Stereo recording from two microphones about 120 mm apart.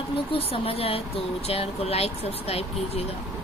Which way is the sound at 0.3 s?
50° left (ahead or behind).